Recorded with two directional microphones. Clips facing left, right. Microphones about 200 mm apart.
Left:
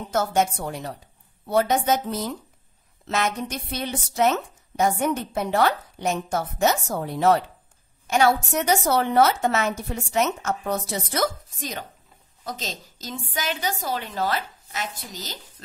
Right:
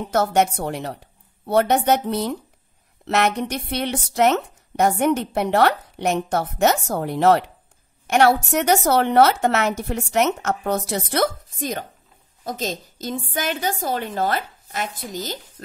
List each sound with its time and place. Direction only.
0.1 s a woman's voice: 65° right (ahead or behind)